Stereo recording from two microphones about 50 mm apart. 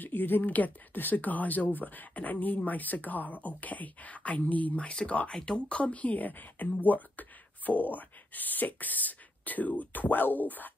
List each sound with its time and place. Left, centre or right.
0.0 s speech: left
5.3 s speech: centre; by 10.7 s left